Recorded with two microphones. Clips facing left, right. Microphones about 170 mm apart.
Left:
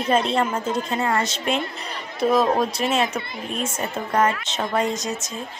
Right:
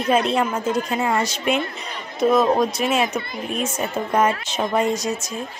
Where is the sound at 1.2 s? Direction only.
25° left (ahead or behind).